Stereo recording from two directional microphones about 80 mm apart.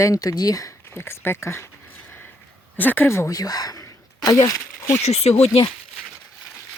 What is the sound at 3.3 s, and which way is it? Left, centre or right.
Speech, left.